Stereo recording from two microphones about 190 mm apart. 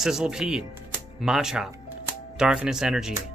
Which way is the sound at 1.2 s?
5° right (ahead or behind).